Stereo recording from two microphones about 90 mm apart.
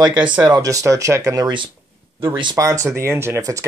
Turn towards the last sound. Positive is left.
turn(degrees=-35)  # may be behind; listen again after turning